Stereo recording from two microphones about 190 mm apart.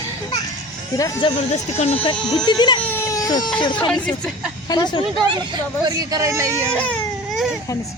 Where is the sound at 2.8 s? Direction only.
15° left (ahead or behind).